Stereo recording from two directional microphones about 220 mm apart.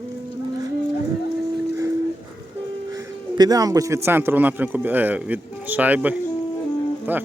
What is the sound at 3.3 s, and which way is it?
A man's voice, 15° right (ahead or behind).